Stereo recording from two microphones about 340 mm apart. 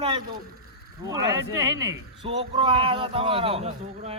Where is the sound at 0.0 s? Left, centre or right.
Centre.